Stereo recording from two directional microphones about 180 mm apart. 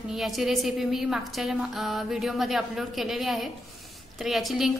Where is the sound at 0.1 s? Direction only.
Centre (ahead or behind).